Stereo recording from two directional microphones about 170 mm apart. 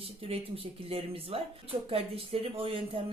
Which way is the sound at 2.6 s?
35° right (ahead or behind).